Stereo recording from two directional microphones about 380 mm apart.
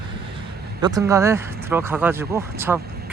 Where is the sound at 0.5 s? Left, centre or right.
Right.